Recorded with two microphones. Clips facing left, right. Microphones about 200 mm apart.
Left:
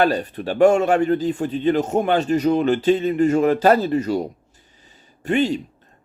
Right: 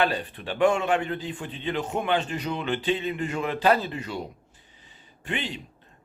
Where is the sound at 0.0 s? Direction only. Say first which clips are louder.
Left 7 dB; 45° left (ahead or behind).